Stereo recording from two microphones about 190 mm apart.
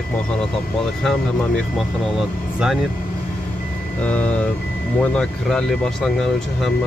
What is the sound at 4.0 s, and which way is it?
Speech, 5° left (ahead or behind).